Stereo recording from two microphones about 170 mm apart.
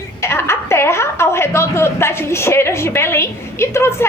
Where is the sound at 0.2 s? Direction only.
15° left (ahead or behind).